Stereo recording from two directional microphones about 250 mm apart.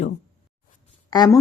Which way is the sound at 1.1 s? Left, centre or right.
Centre.